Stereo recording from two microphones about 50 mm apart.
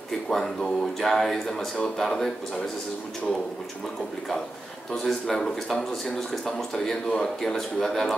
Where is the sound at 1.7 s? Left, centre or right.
Centre.